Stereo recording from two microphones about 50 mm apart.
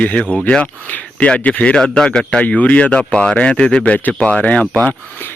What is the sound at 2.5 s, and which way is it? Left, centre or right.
Speech, left.